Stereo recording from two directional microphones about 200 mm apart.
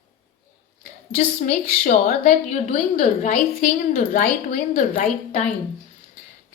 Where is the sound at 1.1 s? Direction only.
40° left (ahead or behind).